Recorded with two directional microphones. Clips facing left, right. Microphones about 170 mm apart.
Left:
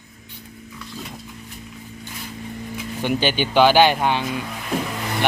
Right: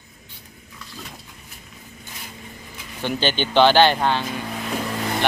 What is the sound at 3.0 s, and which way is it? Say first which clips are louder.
Speech: left 1 dB; 10° left (ahead or behind).